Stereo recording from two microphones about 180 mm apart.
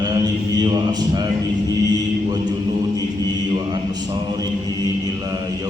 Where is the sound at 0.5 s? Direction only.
20° right (ahead or behind).